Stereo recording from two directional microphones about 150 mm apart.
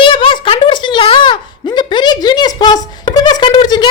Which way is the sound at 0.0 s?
35° left (ahead or behind).